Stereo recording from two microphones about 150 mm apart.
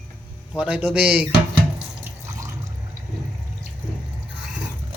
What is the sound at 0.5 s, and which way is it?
Speech, 10° right (ahead or behind).